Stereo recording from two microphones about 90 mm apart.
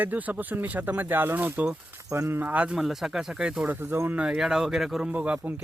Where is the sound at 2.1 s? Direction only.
30° right (ahead or behind); by 3.7 s 10° right (ahead or behind).